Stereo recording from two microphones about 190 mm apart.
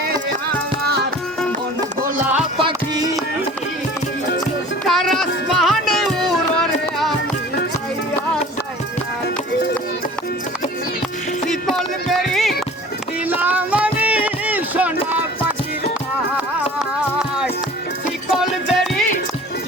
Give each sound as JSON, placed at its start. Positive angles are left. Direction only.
{"t": 2.6, "sound": "music", "side_deg": -25}
{"t": 4.9, "sound": "music", "side_deg": 0}
{"t": 11.4, "sound": "music", "side_deg": 0}
{"t": 13.2, "sound": "a sound", "side_deg": -10}
{"t": 17.2, "sound": "music", "side_deg": -5}
{"t": 18.7, "sound": "music", "side_deg": 0}